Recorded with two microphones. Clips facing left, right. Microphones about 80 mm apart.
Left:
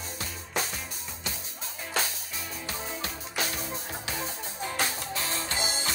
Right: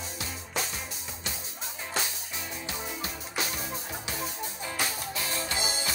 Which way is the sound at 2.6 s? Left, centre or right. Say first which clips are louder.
Left 2 dB; left.